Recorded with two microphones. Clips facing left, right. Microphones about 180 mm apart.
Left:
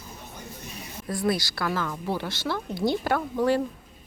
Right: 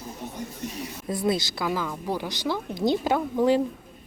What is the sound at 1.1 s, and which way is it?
Speech, 20° right (ahead or behind).